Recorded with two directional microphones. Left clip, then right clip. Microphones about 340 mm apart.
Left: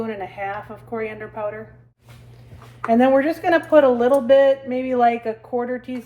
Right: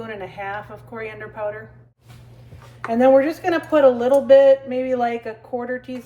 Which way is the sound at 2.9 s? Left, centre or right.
Left.